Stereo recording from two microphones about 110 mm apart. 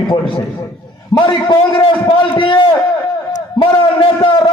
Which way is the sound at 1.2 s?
45° left (ahead or behind).